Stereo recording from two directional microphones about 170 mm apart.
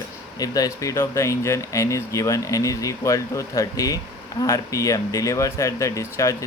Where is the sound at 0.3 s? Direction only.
20° left (ahead or behind).